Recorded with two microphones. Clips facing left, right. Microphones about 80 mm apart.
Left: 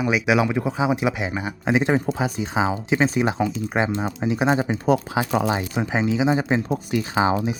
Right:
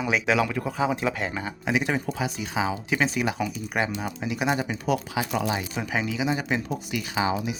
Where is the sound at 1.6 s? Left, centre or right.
Left.